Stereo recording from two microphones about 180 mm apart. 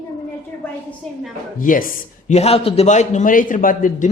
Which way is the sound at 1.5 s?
50° left (ahead or behind).